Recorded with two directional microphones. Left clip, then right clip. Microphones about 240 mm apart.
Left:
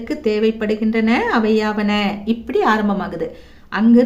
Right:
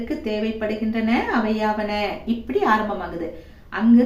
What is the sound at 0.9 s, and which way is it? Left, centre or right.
A woman's voice, left.